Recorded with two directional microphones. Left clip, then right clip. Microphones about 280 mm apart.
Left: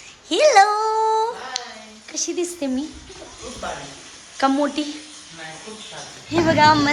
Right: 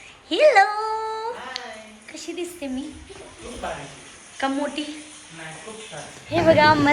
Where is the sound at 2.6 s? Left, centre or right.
Left.